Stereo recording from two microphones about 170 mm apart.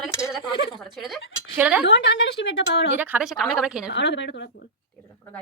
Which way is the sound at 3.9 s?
90° left.